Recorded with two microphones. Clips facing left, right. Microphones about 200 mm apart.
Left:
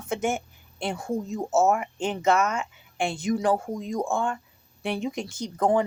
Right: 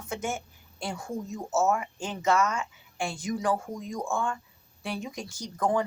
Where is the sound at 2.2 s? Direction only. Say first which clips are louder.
Left 2 dB; 20° left (ahead or behind).